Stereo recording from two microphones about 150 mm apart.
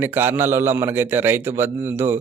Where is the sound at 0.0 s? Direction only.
15° right (ahead or behind).